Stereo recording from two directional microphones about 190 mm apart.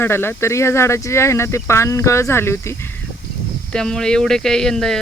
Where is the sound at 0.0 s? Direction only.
10° left (ahead or behind).